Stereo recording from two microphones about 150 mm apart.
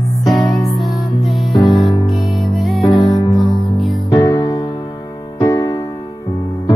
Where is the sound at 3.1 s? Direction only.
25° left (ahead or behind).